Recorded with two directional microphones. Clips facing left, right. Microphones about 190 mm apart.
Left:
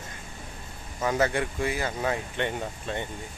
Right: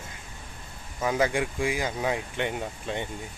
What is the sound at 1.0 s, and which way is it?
Speech, 10° right (ahead or behind).